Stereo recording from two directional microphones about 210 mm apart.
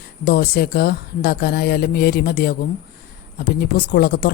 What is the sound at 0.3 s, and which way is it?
Speech, 45° left (ahead or behind).